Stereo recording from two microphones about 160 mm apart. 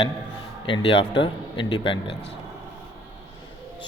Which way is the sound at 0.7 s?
35° left (ahead or behind).